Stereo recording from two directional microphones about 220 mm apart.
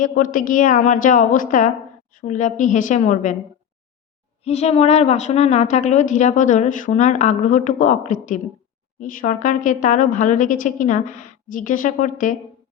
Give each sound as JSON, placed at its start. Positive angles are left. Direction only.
{"t": 0.0, "sound": "a woman's voice", "side_deg": 40}
{"t": 4.4, "sound": "a woman's voice", "side_deg": 30}